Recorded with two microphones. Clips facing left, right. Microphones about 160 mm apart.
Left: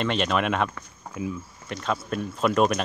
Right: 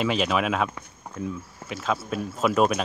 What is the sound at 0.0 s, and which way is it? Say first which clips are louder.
Speech: right 1 dB; 5° right (ahead or behind).